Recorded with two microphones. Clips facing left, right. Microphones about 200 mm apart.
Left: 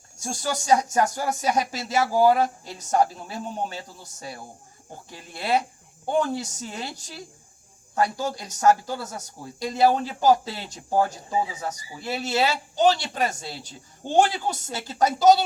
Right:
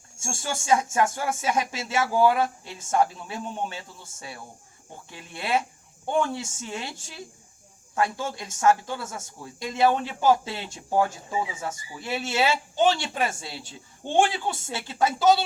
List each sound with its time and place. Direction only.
0.2 s speech: 40° left (ahead or behind)